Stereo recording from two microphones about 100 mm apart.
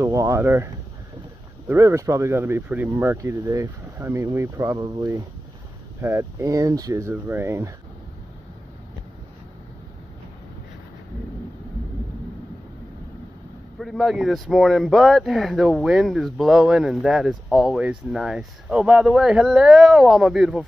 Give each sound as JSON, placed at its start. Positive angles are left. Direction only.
{"t": 0.0, "sound": "speech", "side_deg": -30}
{"t": 1.7, "sound": "speech", "side_deg": -25}
{"t": 6.5, "sound": "speech", "side_deg": -40}
{"t": 7.1, "sound": "speech", "side_deg": -25}
{"t": 13.7, "sound": "speech", "side_deg": 0}
{"t": 17.7, "sound": "speech", "side_deg": -10}